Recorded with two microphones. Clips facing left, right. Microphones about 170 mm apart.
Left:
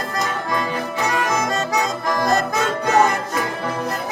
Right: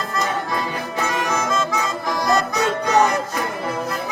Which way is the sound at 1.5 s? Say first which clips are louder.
Left 1 dB; 40° left (ahead or behind).